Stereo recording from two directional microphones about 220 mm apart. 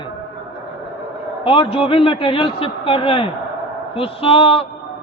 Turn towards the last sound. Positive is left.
turn(degrees=25)  # may be behind; listen again after turning